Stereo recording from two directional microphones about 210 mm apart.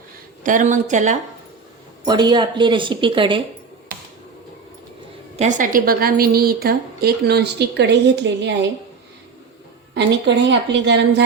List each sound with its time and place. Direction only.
0.4 s speech: 35° right (ahead or behind)
2.0 s speech: 20° right (ahead or behind)
5.4 s a woman's voice: 35° right (ahead or behind); by 8.5 s 55° right (ahead or behind)
9.9 s a woman's voice: 55° right (ahead or behind)